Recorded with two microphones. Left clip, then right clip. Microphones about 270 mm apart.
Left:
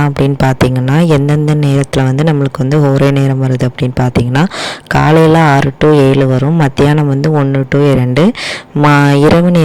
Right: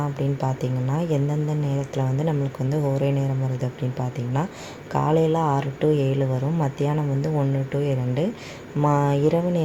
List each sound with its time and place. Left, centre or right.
0.9 s speech: left
4.9 s speech: left
8.8 s speech: left